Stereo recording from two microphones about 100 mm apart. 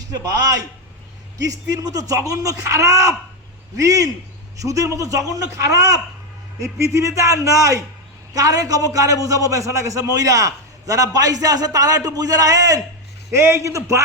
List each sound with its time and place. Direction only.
1.4 s a man's voice: 35° right (ahead or behind)
13.3 s a man's voice: 25° right (ahead or behind)